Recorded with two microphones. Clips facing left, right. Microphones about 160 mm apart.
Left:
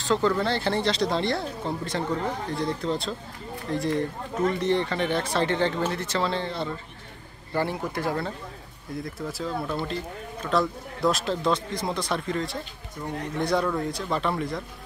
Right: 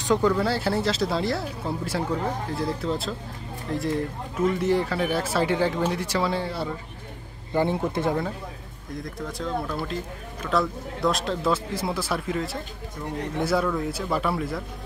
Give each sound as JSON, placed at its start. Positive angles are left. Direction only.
{"t": 0.0, "sound": "speech", "side_deg": -10}
{"t": 7.5, "sound": "speech", "side_deg": -20}
{"t": 9.0, "sound": "speech", "side_deg": 5}